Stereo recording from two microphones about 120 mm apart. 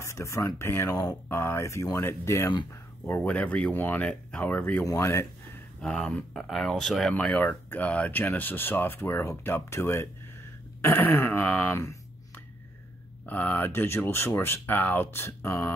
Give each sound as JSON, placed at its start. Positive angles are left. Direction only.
{"t": 0.0, "sound": "speech", "side_deg": 25}
{"t": 5.8, "sound": "speech", "side_deg": 5}
{"t": 13.2, "sound": "speech", "side_deg": 15}